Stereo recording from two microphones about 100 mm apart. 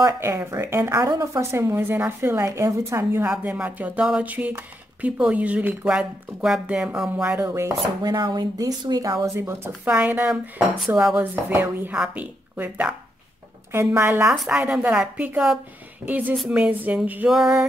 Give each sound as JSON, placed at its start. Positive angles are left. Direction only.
{"t": 0.0, "sound": "speech", "side_deg": -30}
{"t": 3.3, "sound": "speech", "side_deg": -10}
{"t": 7.3, "sound": "speech", "side_deg": -25}
{"t": 8.0, "sound": "speech", "side_deg": -45}
{"t": 9.3, "sound": "speech", "side_deg": -25}
{"t": 9.8, "sound": "a woman's voice", "side_deg": -15}
{"t": 11.3, "sound": "speech", "side_deg": -20}
{"t": 14.2, "sound": "a woman's voice", "side_deg": -5}
{"t": 14.6, "sound": "speech", "side_deg": -15}
{"t": 17.3, "sound": "a woman's voice", "side_deg": -5}